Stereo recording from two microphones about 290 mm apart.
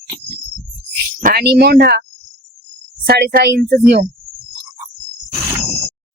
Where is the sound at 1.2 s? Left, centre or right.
Right.